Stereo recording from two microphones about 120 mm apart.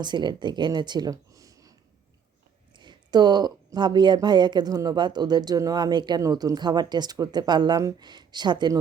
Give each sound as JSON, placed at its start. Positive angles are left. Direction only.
{"t": 0.0, "sound": "speech", "side_deg": -40}
{"t": 2.7, "sound": "speech", "side_deg": -40}